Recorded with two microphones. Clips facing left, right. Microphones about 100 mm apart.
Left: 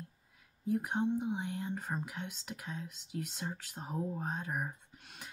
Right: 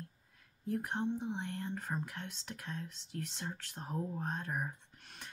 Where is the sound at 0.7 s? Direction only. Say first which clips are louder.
Left 3 dB; 10° left (ahead or behind).